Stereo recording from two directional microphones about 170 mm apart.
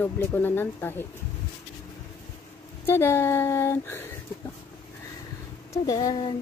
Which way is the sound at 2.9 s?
15° left (ahead or behind).